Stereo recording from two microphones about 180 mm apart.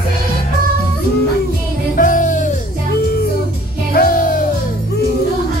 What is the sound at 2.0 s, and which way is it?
Music, 45° left (ahead or behind).